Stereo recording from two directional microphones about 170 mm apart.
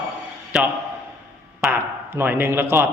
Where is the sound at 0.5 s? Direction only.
Centre (ahead or behind).